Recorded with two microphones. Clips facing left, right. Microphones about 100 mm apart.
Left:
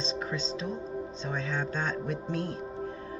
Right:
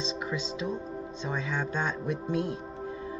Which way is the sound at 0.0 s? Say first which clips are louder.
Even; 30° left (ahead or behind).